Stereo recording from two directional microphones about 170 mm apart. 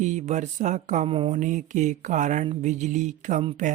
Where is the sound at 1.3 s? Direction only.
45° right (ahead or behind).